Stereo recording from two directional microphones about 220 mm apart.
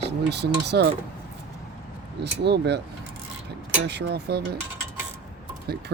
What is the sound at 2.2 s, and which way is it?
Speech, 50° right (ahead or behind).